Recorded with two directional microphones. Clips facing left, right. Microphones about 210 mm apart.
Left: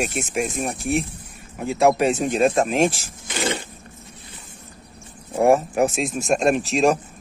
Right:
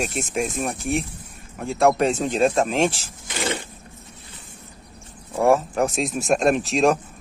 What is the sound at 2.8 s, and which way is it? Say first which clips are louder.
Speech: left 2 dB; 40° left (ahead or behind).